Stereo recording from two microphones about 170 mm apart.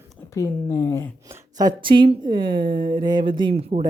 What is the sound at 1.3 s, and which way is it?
Speech, 25° right (ahead or behind).